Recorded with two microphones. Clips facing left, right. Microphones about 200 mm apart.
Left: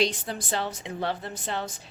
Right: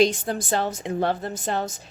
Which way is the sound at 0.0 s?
45° right (ahead or behind).